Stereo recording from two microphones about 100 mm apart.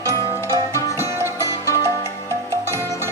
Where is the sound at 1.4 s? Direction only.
35° left (ahead or behind).